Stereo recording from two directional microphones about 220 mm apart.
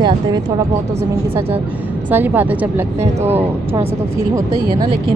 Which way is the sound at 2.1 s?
10° right (ahead or behind).